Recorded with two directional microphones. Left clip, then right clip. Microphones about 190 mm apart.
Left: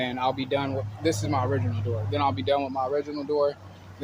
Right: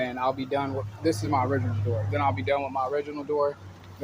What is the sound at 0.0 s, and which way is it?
Speech, 25° left (ahead or behind).